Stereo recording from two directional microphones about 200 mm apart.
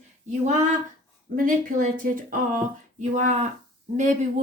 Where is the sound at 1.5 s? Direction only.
45° right (ahead or behind).